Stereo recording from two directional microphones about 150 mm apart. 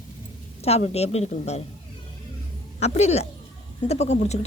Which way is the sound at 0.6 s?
45° left (ahead or behind).